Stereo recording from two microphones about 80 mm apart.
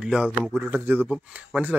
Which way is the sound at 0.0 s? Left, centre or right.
Centre.